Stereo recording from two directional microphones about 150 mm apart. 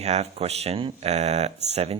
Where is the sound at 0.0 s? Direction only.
45° right (ahead or behind).